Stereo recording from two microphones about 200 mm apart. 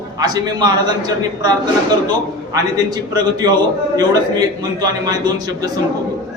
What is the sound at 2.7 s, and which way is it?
A man's voice, 20° right (ahead or behind).